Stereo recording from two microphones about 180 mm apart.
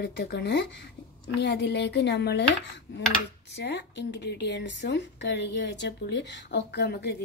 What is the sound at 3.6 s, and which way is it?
Speech, 70° left (ahead or behind).